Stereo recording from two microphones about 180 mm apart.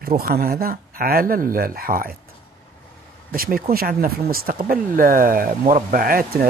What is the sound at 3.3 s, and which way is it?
Speech, 55° right (ahead or behind).